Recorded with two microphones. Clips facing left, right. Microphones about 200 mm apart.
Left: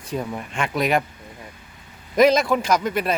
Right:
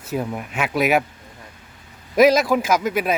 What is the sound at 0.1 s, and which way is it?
Speech, 5° right (ahead or behind).